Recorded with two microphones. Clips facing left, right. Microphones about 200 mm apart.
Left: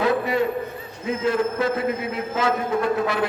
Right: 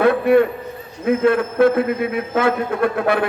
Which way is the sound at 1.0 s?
60° right (ahead or behind).